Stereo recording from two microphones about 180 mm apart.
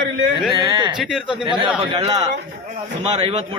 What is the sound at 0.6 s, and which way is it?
Speech, 25° right (ahead or behind).